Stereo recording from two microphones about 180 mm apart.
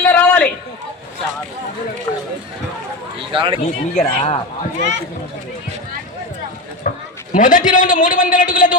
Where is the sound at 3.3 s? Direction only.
30° right (ahead or behind).